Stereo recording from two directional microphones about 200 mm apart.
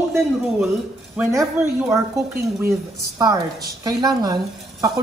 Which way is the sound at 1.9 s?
15° right (ahead or behind).